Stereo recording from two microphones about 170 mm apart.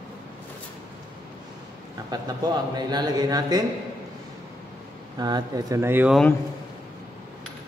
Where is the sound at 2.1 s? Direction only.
25° right (ahead or behind).